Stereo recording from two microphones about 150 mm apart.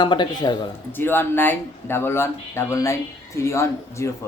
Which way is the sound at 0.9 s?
15° left (ahead or behind).